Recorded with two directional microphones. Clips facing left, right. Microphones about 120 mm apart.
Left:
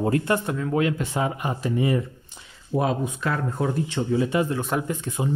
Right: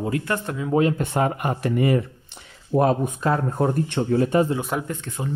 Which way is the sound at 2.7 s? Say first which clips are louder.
Right 4 dB; 50° right (ahead or behind).